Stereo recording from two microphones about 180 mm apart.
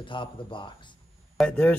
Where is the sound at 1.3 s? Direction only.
5° left (ahead or behind).